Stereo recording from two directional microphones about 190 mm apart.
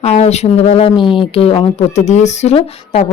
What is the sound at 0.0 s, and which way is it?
Speech, 35° left (ahead or behind).